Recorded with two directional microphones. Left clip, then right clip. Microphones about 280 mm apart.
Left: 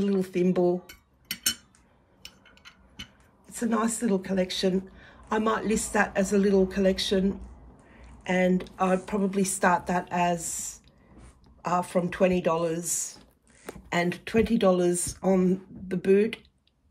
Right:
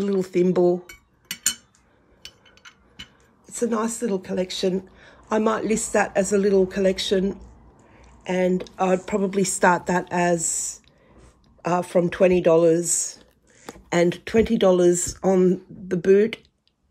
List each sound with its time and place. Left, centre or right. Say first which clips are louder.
0.0 s speech: right 5 dB; centre
3.4 s speech: right 4 dB; centre